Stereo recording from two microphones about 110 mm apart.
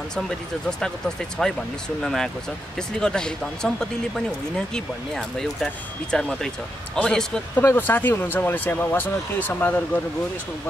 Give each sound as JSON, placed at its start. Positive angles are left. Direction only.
{"t": 0.7, "sound": "speech", "side_deg": 5}
{"t": 7.6, "sound": "speech", "side_deg": 20}